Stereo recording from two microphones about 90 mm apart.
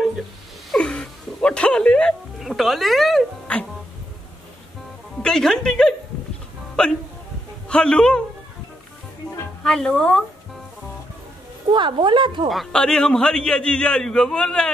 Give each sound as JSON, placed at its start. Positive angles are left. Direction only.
{"t": 0.7, "sound": "music", "side_deg": 10}
{"t": 2.4, "sound": "speech", "side_deg": 0}
{"t": 3.5, "sound": "music", "side_deg": 15}
{"t": 5.2, "sound": "a man's voice", "side_deg": 5}
{"t": 9.6, "sound": "a man's voice", "side_deg": 10}
{"t": 11.7, "sound": "a woman's voice", "side_deg": -65}
{"t": 12.7, "sound": "a man's voice", "side_deg": 10}